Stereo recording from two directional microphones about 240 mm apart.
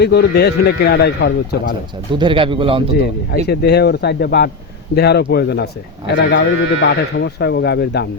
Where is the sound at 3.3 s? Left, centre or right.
Left.